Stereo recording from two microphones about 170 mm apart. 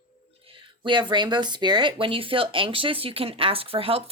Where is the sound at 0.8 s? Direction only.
25° right (ahead or behind).